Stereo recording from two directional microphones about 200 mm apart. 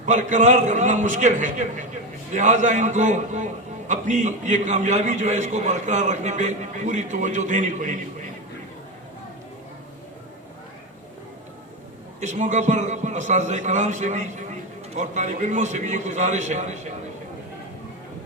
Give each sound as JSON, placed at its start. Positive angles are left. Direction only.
{"t": 0.0, "sound": "a man's voice", "side_deg": -40}
{"t": 12.2, "sound": "a man's voice", "side_deg": -40}